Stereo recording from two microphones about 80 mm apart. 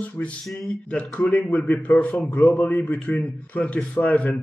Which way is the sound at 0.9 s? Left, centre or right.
Centre.